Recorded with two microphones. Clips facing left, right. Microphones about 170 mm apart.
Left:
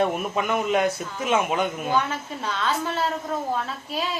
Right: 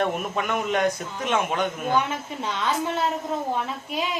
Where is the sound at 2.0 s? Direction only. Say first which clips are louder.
Even; 20° right (ahead or behind).